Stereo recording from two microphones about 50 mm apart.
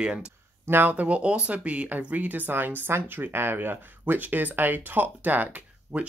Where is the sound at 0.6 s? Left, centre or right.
Right.